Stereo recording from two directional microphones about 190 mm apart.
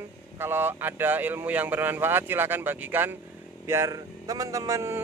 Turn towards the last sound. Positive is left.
turn(degrees=-15)  # may be behind; listen again after turning